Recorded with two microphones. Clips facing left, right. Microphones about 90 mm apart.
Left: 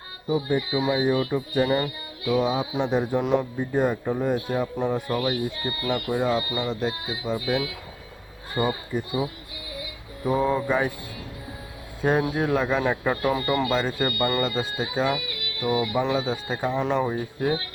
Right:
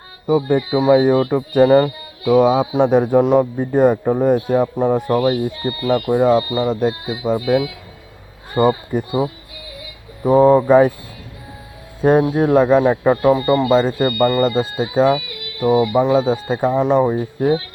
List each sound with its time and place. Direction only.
0.3 s speech: 75° right (ahead or behind)
0.9 s speech: 60° right (ahead or behind)
5.3 s speech: 35° right (ahead or behind)
12.0 s speech: 35° right (ahead or behind)
16.8 s speech: 25° right (ahead or behind)